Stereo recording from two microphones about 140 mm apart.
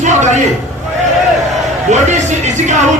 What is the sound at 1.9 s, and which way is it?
Speech, 55° right (ahead or behind).